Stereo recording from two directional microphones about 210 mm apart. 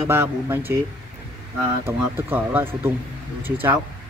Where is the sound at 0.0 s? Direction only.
10° right (ahead or behind).